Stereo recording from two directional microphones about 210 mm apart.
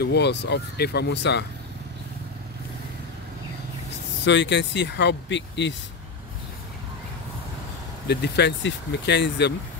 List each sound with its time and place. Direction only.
0.0 s speech: 55° left (ahead or behind)
4.2 s speech: 60° left (ahead or behind)
8.1 s speech: 55° left (ahead or behind)